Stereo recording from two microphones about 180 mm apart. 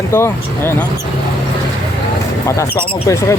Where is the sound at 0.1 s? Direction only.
15° left (ahead or behind).